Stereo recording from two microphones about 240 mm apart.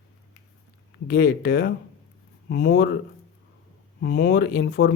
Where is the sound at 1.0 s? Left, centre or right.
Left.